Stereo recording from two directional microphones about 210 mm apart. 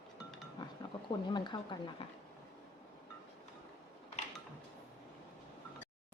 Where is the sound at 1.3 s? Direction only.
20° left (ahead or behind).